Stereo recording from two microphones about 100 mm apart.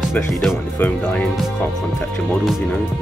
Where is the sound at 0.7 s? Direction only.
15° left (ahead or behind).